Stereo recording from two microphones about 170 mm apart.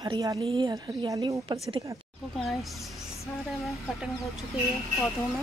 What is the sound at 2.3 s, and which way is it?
Speech, centre (ahead or behind).